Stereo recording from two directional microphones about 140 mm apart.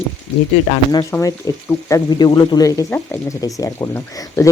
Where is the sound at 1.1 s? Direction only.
25° left (ahead or behind).